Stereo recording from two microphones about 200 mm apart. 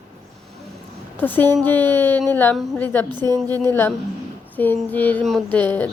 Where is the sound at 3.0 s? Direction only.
20° right (ahead or behind).